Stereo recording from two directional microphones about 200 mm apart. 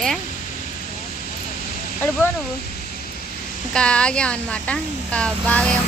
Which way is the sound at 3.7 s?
5° left (ahead or behind).